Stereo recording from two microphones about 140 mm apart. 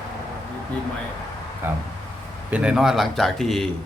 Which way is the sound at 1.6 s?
15° right (ahead or behind).